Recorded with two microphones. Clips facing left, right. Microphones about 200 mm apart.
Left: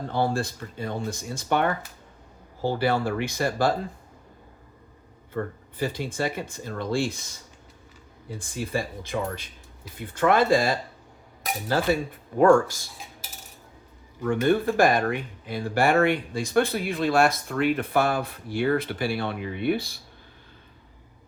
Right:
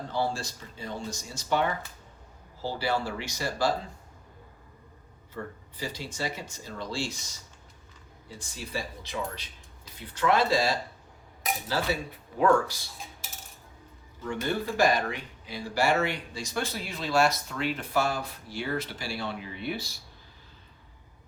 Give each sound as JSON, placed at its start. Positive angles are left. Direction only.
{"t": 0.1, "sound": "speech", "side_deg": 55}
{"t": 5.3, "sound": "speech", "side_deg": 55}
{"t": 8.3, "sound": "speech", "side_deg": 55}
{"t": 14.2, "sound": "speech", "side_deg": 55}